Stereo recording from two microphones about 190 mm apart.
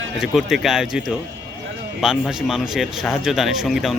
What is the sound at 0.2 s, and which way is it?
Speech, centre (ahead or behind).